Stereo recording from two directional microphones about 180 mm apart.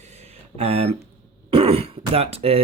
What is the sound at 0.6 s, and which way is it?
Speech, 35° right (ahead or behind).